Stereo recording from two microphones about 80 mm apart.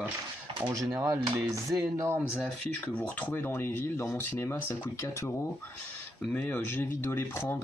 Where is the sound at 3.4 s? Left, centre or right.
Left.